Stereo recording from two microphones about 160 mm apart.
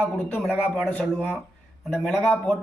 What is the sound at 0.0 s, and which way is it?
A man's voice, 5° left (ahead or behind).